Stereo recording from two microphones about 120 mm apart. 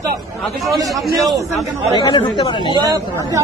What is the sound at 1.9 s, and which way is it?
Speech, 40° left (ahead or behind).